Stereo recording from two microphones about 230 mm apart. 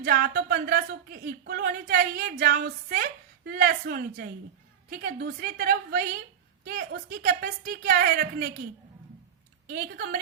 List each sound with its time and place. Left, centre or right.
0.0 s speech: right
9.6 s speech: right